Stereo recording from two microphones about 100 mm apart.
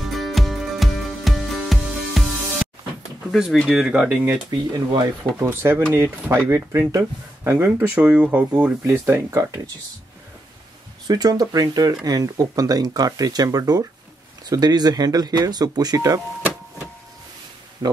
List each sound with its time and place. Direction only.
0.0 s music: centre (ahead or behind)
3.3 s speech: centre (ahead or behind)
4.7 s speech: 45° right (ahead or behind)
5.2 s speech: 20° right (ahead or behind)
11.1 s speech: 40° right (ahead or behind)